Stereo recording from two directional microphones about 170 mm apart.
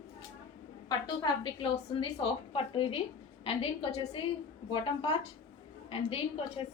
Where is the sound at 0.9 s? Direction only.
25° left (ahead or behind).